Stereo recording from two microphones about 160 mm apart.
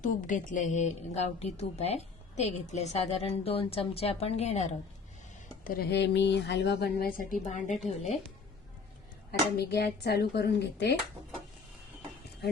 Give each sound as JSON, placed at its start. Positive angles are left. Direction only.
{"t": 0.0, "sound": "a woman's voice", "side_deg": 55}
{"t": 5.6, "sound": "speech", "side_deg": 70}
{"t": 9.6, "sound": "speech", "side_deg": 80}